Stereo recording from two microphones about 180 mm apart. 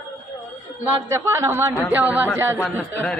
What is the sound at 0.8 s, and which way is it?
A man's voice, 15° right (ahead or behind).